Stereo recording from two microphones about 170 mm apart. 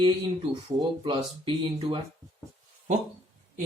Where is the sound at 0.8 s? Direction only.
30° right (ahead or behind).